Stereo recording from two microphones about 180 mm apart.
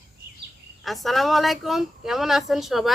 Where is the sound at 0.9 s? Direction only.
Centre (ahead or behind).